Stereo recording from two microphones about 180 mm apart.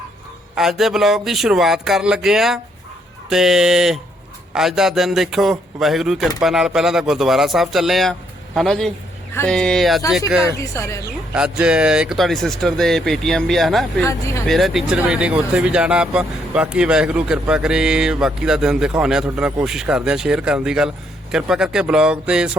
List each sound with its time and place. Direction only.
0.5 s speech: centre (ahead or behind)
10.6 s speech: 15° left (ahead or behind)
11.3 s speech: 5° right (ahead or behind)
14.0 s speech: 15° left (ahead or behind)
14.4 s speech: centre (ahead or behind)